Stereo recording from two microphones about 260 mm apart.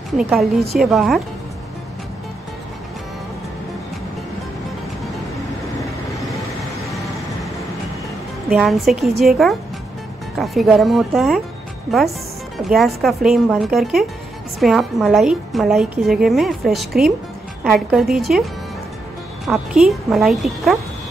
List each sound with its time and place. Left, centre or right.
0.2 s a woman's voice: centre
6.9 s vehicle: centre
8.5 s a woman's voice: centre